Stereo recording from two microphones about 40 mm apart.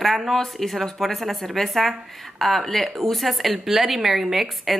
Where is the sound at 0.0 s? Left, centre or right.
Centre.